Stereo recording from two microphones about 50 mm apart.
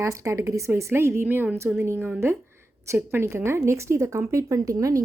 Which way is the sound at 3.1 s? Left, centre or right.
Right.